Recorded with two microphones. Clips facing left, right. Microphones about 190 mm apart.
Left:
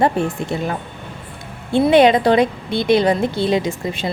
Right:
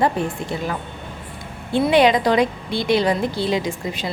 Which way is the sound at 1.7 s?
25° left (ahead or behind).